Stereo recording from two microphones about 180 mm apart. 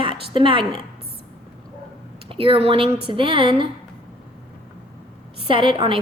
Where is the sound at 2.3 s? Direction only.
30° right (ahead or behind).